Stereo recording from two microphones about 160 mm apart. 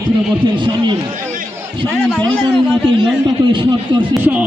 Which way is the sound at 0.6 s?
30° right (ahead or behind).